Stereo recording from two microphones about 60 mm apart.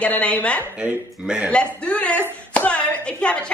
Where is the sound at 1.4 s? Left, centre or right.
Centre.